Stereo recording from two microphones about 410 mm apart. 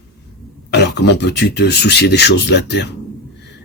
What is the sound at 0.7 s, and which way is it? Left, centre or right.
Speech, left.